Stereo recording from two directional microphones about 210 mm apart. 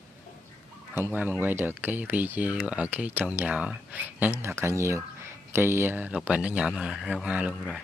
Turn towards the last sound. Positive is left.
turn(degrees=-5)  # may be behind; listen again after turning